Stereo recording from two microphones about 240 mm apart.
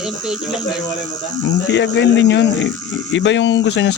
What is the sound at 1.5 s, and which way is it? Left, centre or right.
Speech, left.